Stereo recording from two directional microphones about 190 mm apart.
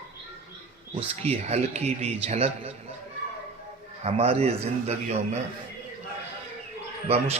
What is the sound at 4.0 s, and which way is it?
A man's voice, 35° right (ahead or behind).